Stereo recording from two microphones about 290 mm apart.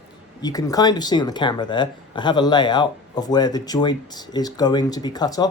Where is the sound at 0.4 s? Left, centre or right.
Centre.